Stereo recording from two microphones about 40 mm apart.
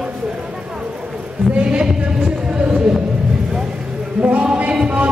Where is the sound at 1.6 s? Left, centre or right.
Right.